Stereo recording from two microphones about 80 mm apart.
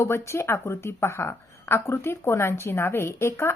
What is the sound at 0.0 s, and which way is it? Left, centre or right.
A woman's voice, left.